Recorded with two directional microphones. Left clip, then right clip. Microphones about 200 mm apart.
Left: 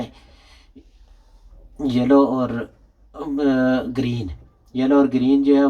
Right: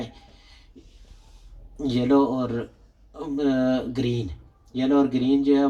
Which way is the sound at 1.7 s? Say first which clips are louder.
Left 5 dB; 20° left (ahead or behind).